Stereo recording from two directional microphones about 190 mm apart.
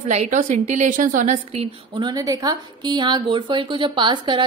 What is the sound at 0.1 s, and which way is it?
A woman's voice, 40° right (ahead or behind).